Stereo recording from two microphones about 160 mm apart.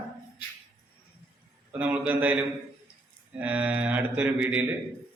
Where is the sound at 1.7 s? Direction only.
10° right (ahead or behind).